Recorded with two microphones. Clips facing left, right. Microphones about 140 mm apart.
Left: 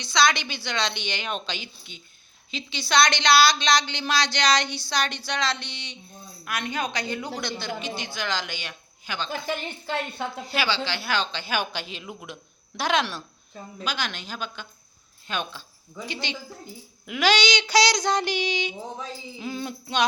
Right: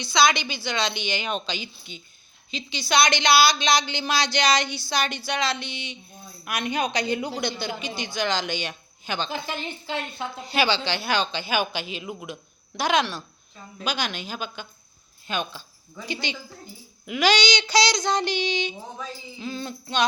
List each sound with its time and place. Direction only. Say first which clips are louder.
0.0 s a woman's voice: right 2 dB; 10° right (ahead or behind); by 9.3 s 25° right (ahead or behind)
9.3 s a woman's voice: left 1 dB; 50° left (ahead or behind)
10.4 s speech: right 5 dB; 20° right (ahead or behind); by 13.2 s centre (ahead or behind)
13.8 s a woman's voice: right 3 dB; 15° right (ahead or behind)
17.1 s child singing: right 1 dB; centre (ahead or behind)